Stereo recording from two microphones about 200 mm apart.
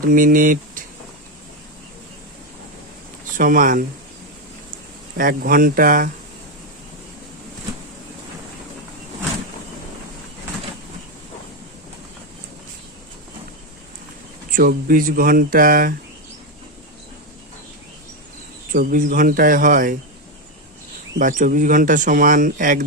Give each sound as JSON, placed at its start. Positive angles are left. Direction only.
{"t": 0.0, "sound": "speech", "side_deg": -45}
{"t": 3.3, "sound": "speech", "side_deg": -45}
{"t": 5.1, "sound": "speech", "side_deg": -45}
{"t": 14.5, "sound": "speech", "side_deg": -45}
{"t": 18.7, "sound": "speech", "side_deg": -45}
{"t": 21.2, "sound": "speech", "side_deg": -40}